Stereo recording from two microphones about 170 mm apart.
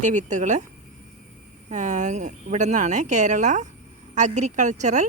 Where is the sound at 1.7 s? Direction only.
45° right (ahead or behind).